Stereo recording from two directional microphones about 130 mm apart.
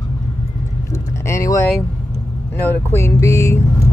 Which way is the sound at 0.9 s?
25° left (ahead or behind).